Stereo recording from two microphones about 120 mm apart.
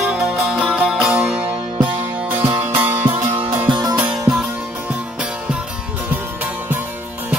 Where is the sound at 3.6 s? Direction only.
40° right (ahead or behind).